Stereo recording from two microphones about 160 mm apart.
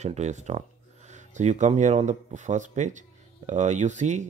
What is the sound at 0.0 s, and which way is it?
Speech, 45° right (ahead or behind).